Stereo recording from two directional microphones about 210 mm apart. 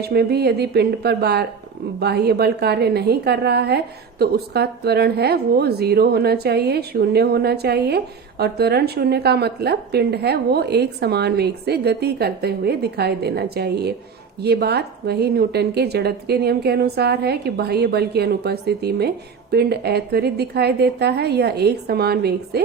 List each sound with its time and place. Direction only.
0.0 s a woman's voice: 50° right (ahead or behind)